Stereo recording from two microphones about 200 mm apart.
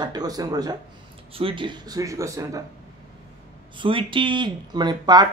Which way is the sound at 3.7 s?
25° right (ahead or behind).